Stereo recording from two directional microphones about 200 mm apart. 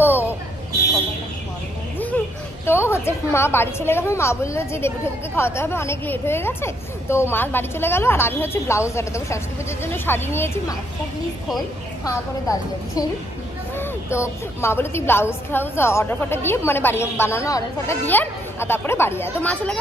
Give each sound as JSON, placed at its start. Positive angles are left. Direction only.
{"t": 0.0, "sound": "buzzer", "side_deg": 10}
{"t": 2.1, "sound": "a sound", "side_deg": 10}
{"t": 2.6, "sound": "a woman's voice", "side_deg": 10}
{"t": 12.1, "sound": "a woman's voice", "side_deg": 15}